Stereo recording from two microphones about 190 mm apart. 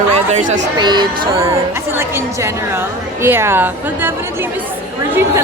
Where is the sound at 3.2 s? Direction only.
15° right (ahead or behind).